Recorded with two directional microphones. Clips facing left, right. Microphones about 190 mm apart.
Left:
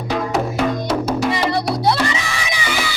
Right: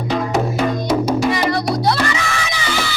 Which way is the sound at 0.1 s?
5° left (ahead or behind).